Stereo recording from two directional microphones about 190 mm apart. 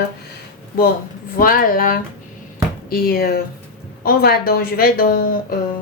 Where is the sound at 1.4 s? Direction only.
45° left (ahead or behind).